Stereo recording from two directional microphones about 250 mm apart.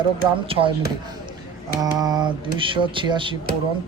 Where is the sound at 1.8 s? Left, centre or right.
Centre.